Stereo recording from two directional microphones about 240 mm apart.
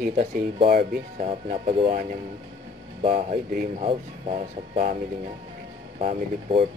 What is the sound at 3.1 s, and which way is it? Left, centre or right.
Speech, right.